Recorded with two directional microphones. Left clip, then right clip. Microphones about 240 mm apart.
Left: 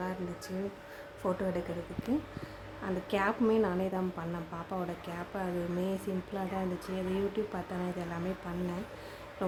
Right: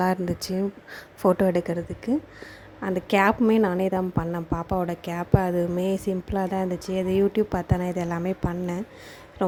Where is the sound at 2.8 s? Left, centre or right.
Right.